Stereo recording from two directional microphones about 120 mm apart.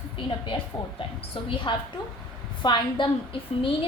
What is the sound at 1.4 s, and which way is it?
Speech, 50° left (ahead or behind).